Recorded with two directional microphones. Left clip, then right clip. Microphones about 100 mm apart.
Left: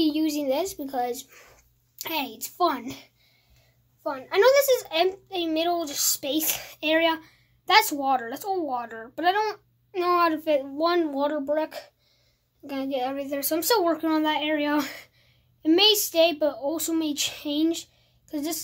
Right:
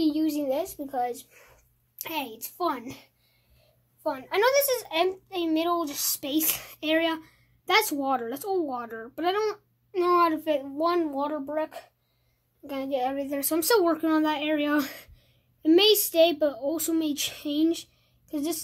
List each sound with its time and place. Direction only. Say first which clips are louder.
0.0 s a sound: left 1 dB; 10° left (ahead or behind)
2.0 s a child's voice: left 3 dB; 5° left (ahead or behind)
4.3 s a child's voice: left 5 dB; 15° right (ahead or behind); by 11.4 s centre (ahead or behind)
11.4 s a child's voice: left 4 dB; 15° left (ahead or behind)
12.6 s a child's voice: even; 5° right (ahead or behind)